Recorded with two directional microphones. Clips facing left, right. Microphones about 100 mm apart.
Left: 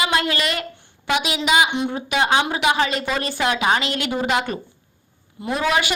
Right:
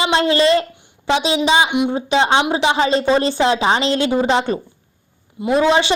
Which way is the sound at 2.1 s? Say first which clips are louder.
Right 3 dB; 30° right (ahead or behind).